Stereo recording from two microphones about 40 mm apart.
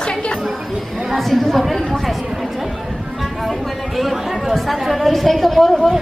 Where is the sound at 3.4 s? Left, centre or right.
Centre.